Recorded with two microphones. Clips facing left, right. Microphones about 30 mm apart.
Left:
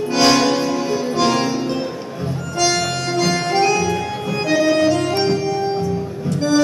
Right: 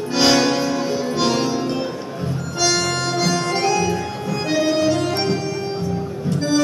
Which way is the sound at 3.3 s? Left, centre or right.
Centre.